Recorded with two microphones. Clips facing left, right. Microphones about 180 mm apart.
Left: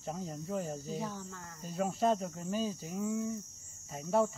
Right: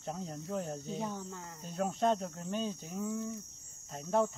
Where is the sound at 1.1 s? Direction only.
15° right (ahead or behind).